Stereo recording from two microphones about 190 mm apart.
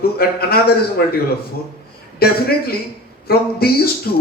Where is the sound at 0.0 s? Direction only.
55° left (ahead or behind).